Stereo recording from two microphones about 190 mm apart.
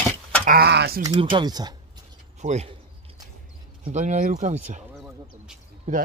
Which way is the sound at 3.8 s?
40° right (ahead or behind).